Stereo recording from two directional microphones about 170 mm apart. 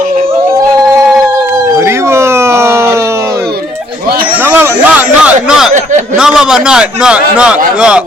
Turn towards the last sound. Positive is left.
turn(degrees=-5)  # may be behind; listen again after turning